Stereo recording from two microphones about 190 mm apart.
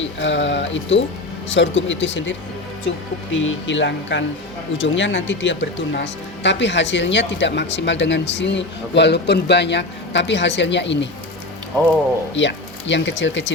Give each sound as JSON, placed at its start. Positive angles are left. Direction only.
{"t": 0.0, "sound": "speech", "side_deg": 75}
{"t": 3.3, "sound": "speech", "side_deg": 85}
{"t": 12.3, "sound": "speech", "side_deg": 70}